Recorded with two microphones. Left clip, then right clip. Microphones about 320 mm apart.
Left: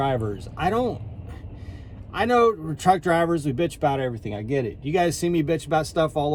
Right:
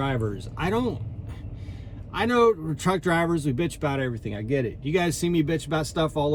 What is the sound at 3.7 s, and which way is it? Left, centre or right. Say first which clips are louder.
Speech: left 4 dB; left.